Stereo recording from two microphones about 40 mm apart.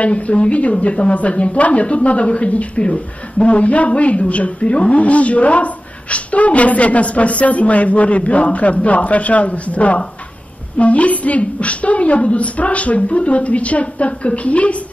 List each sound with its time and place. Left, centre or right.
0.0 s a woman's voice: left